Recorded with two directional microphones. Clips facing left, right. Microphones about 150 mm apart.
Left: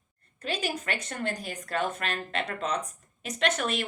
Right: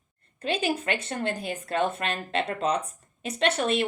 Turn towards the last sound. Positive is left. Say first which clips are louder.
# right 4 dB
turn(degrees=-30)  # may be behind; listen again after turning